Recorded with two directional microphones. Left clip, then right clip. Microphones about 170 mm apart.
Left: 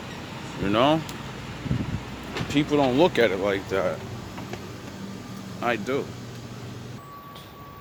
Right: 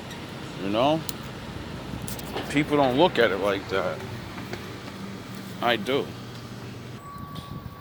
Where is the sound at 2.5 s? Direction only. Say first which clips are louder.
Even; 35° left (ahead or behind).